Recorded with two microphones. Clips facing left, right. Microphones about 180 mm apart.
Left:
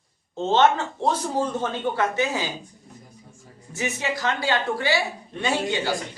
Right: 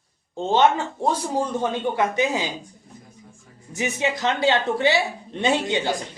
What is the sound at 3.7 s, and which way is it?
A woman's voice, 20° right (ahead or behind).